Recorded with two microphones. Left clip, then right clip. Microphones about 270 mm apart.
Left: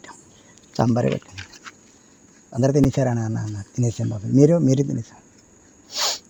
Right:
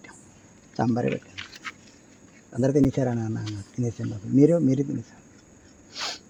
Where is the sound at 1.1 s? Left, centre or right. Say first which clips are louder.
Left 3 dB; left.